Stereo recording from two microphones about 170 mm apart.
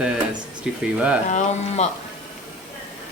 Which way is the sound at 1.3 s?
40° left (ahead or behind).